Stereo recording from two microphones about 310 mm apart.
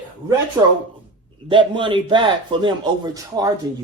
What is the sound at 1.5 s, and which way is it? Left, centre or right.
Speech, centre.